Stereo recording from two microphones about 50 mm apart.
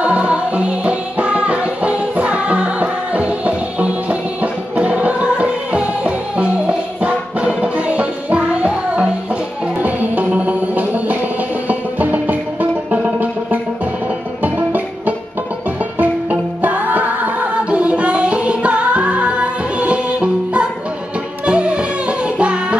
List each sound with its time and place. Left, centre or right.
0.0 s music: right